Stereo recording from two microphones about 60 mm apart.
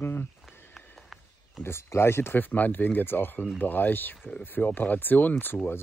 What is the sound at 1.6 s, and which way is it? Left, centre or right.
Speech, left.